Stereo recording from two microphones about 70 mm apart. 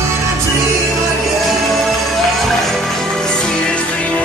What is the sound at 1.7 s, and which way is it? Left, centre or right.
Music, centre.